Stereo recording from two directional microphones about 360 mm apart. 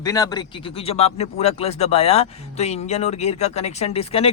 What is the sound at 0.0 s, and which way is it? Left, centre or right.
Speech, centre.